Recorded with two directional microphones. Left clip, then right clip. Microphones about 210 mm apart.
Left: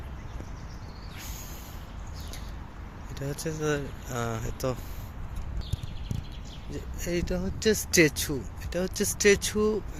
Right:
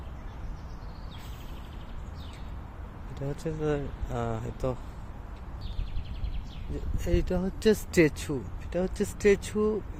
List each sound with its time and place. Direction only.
3.2 s speech: 5° right (ahead or behind)
7.0 s speech: 15° right (ahead or behind)
7.9 s speech: 5° right (ahead or behind)